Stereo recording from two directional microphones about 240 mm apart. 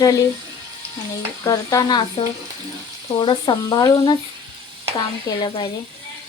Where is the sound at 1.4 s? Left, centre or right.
Centre.